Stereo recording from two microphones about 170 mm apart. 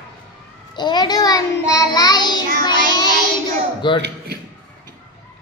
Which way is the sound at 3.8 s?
25° left (ahead or behind).